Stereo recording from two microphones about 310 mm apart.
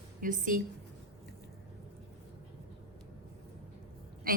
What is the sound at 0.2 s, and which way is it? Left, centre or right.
Speech, right.